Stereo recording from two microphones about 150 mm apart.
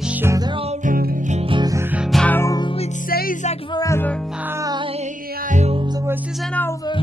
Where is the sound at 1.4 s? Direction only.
35° right (ahead or behind).